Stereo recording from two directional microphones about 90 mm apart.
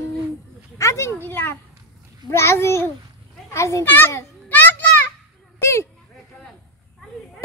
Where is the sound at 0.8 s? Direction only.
35° left (ahead or behind).